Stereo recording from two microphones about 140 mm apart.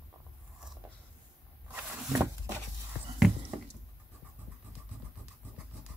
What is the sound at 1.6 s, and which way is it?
Wild animals, 15° right (ahead or behind).